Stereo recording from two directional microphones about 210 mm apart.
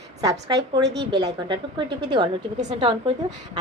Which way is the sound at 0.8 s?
55° right (ahead or behind).